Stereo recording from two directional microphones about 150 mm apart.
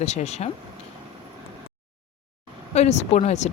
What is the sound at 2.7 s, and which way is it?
Speech, 45° left (ahead or behind).